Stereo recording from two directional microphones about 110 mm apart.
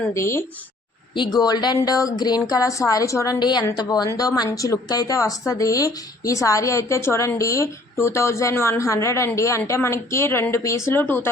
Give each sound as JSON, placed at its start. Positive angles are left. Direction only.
{"t": 0.1, "sound": "speech", "side_deg": 25}
{"t": 1.1, "sound": "speech", "side_deg": 40}
{"t": 3.3, "sound": "speech", "side_deg": 40}